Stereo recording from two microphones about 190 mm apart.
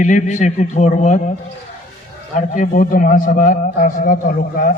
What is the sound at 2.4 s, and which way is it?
A man's voice, 45° left (ahead or behind).